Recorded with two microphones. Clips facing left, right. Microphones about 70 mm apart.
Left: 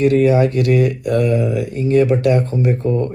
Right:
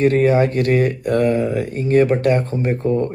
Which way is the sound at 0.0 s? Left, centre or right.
Right.